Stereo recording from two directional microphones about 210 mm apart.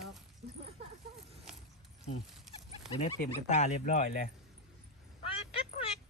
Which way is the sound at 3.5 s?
35° left (ahead or behind).